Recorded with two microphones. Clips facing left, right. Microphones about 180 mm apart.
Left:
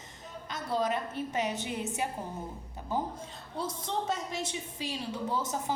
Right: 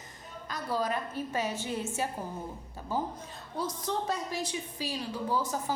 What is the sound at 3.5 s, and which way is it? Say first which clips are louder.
A woman's voice: right 1 dB; 25° left (ahead or behind).